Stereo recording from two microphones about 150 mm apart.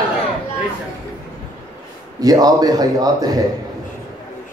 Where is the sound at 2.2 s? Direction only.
25° right (ahead or behind).